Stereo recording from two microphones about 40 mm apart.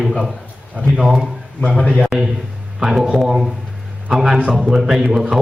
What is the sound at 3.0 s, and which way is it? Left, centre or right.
Speech, centre.